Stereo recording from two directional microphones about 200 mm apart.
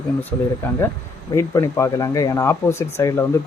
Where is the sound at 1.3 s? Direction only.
15° left (ahead or behind).